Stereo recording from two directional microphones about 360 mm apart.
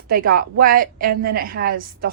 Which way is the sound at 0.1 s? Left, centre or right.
Right.